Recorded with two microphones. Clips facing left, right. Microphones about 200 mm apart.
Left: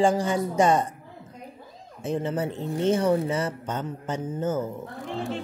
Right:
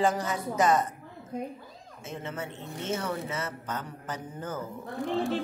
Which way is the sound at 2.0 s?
35° left (ahead or behind).